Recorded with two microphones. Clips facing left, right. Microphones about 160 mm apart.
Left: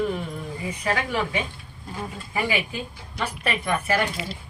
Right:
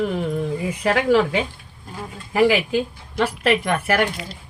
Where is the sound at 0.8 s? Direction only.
90° right; by 4.1 s 70° right (ahead or behind).